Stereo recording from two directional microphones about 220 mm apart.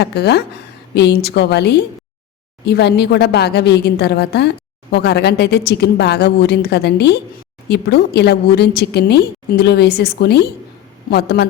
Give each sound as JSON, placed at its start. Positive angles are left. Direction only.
{"t": 0.0, "sound": "a woman's voice", "side_deg": 50}